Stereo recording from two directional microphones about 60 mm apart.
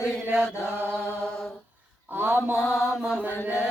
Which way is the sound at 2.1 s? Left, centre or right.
Right.